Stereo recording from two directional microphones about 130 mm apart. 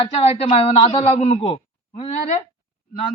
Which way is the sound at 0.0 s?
50° left (ahead or behind).